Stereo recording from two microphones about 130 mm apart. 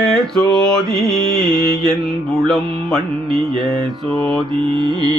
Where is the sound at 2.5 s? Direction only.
Centre (ahead or behind).